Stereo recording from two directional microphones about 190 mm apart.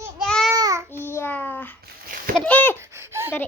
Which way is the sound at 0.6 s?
20° right (ahead or behind).